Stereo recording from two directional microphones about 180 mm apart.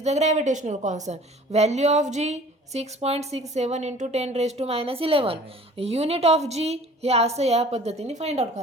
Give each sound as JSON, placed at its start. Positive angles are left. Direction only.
{"t": 0.0, "sound": "speech", "side_deg": -40}